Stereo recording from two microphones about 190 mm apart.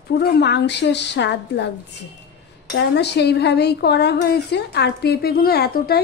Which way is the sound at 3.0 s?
60° left (ahead or behind).